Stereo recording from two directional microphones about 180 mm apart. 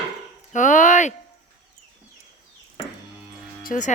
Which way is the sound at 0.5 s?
45° left (ahead or behind).